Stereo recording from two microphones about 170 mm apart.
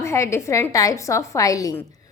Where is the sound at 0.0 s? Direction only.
15° left (ahead or behind).